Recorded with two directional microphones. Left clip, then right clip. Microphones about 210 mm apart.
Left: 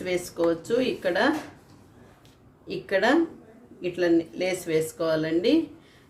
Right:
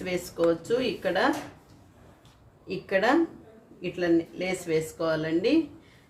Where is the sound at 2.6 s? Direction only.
5° left (ahead or behind).